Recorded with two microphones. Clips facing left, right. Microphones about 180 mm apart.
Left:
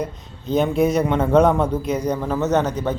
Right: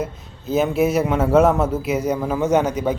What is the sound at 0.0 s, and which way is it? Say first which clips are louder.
A man's voice: even; 5° right (ahead or behind).